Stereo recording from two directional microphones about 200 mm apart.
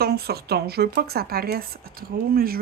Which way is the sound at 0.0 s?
50° right (ahead or behind).